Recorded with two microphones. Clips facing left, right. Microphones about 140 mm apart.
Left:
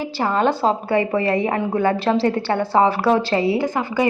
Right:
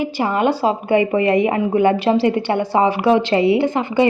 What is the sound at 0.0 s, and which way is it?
A woman's voice, 15° right (ahead or behind).